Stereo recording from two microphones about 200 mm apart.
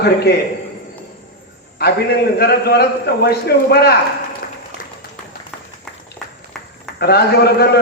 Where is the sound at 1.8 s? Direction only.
55° left (ahead or behind).